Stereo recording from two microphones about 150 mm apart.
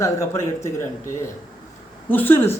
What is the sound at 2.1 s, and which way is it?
Speech, 15° left (ahead or behind).